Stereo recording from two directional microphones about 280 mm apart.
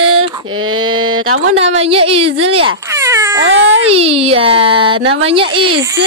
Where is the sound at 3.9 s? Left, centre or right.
Right.